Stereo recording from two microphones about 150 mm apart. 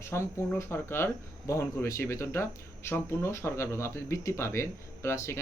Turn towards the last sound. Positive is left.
turn(degrees=20)  # may be behind; listen again after turning